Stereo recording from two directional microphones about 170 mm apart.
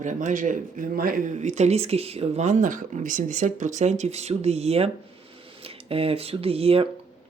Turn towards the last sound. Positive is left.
turn(degrees=-35)  # may be behind; listen again after turning